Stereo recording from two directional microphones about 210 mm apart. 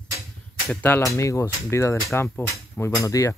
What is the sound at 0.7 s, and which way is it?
Speech, 5° left (ahead or behind).